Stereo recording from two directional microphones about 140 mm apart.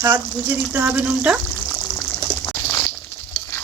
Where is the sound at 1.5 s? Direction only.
10° left (ahead or behind).